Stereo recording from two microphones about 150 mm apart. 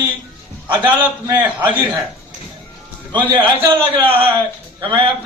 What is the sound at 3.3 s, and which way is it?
Speech, 35° right (ahead or behind).